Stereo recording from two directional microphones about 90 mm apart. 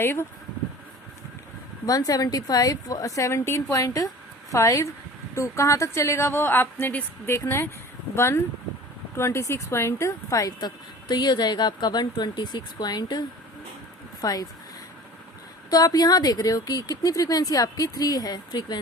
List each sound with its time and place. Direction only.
0.0 s a woman's voice: 25° left (ahead or behind)
1.9 s a woman's voice: 45° left (ahead or behind)
11.1 s speech: 50° left (ahead or behind)
15.7 s speech: 45° left (ahead or behind)